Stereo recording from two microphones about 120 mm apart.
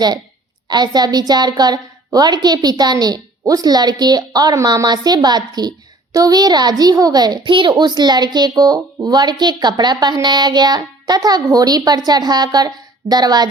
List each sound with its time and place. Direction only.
0.7 s a woman's voice: 35° right (ahead or behind)